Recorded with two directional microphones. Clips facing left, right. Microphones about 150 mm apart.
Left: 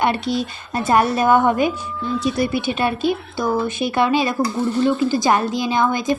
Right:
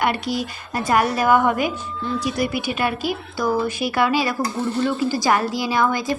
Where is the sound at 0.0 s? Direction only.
25° left (ahead or behind).